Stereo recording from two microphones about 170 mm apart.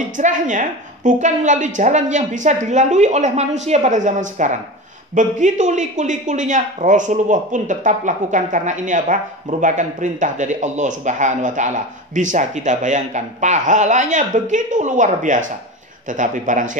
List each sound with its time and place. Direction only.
0.2 s speech: 45° right (ahead or behind)